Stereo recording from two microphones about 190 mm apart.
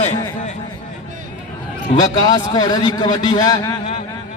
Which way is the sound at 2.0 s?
20° left (ahead or behind).